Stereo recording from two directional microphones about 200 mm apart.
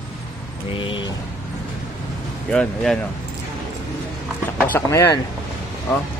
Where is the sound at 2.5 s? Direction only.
5° left (ahead or behind).